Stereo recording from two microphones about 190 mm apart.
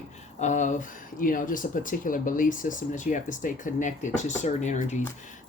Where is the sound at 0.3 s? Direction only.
40° left (ahead or behind).